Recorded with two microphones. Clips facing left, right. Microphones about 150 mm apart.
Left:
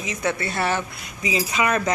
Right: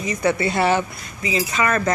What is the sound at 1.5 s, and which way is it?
Speech, 5° left (ahead or behind).